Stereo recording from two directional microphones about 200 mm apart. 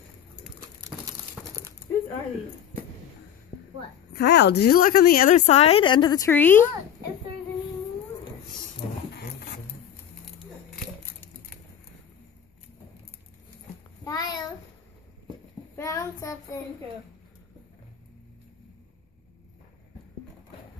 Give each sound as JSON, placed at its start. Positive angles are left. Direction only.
{"t": 0.8, "sound": "crumpling", "side_deg": -15}
{"t": 4.1, "sound": "a woman's voice", "side_deg": 55}
{"t": 14.0, "sound": "a sound", "side_deg": 20}
{"t": 15.7, "sound": "child singing", "side_deg": 15}